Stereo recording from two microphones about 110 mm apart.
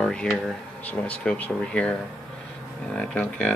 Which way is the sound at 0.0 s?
10° left (ahead or behind).